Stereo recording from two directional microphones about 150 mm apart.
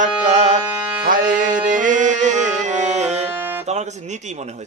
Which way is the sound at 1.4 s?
60° right (ahead or behind).